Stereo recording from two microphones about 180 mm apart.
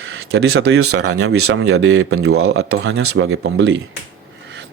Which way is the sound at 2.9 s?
85° right.